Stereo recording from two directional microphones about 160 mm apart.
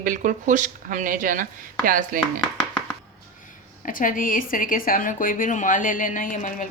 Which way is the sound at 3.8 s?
55° left (ahead or behind).